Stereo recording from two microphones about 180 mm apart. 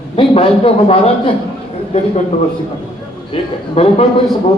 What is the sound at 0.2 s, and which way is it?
Speech, 30° left (ahead or behind).